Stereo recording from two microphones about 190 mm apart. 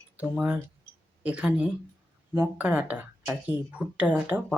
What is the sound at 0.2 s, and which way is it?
Speech, 10° right (ahead or behind).